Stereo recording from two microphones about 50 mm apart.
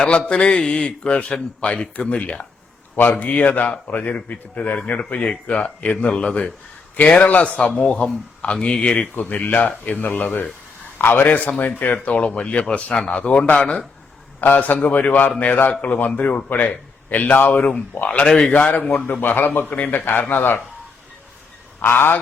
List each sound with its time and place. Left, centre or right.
0.0 s a man's voice: centre
14.4 s a man's voice: left
21.8 s speech: left